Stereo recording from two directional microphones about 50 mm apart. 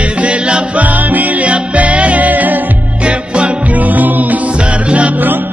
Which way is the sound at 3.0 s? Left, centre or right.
Right.